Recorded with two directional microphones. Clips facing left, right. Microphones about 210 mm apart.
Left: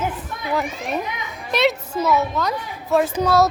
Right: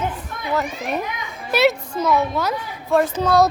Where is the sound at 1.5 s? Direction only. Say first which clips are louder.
Right 2 dB; 5° right (ahead or behind).